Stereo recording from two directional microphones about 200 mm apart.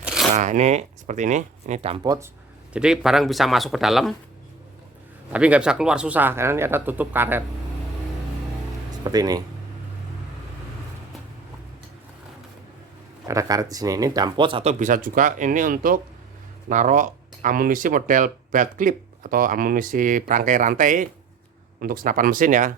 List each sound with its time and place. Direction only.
0.0 s a sound: centre (ahead or behind)
0.3 s speech: 35° right (ahead or behind)
2.0 s speech: 15° right (ahead or behind)
2.7 s speech: 5° right (ahead or behind)
5.3 s speech: 5° right (ahead or behind)
9.0 s speech: 20° right (ahead or behind)
13.2 s speech: 15° right (ahead or behind); by 22.7 s 40° right (ahead or behind)